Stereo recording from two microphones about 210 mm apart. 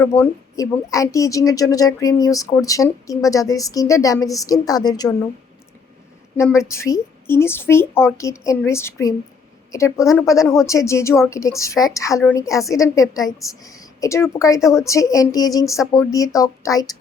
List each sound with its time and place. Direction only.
0.0 s a woman's voice: 10° left (ahead or behind)
6.3 s a woman's voice: 15° left (ahead or behind)